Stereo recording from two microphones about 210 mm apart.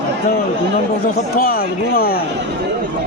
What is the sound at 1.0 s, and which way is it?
Speech, 45° left (ahead or behind).